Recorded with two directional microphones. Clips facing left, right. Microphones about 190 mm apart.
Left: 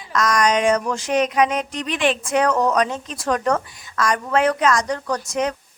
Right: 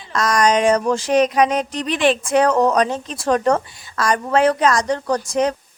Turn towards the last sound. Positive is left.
turn(degrees=-30)  # may be behind; listen again after turning